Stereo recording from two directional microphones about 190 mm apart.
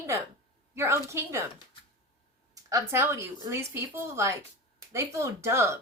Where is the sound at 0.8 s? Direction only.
15° right (ahead or behind).